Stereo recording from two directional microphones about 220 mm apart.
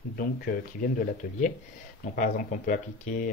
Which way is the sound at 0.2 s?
40° left (ahead or behind).